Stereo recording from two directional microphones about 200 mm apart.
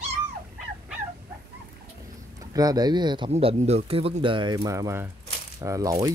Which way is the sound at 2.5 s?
20° right (ahead or behind).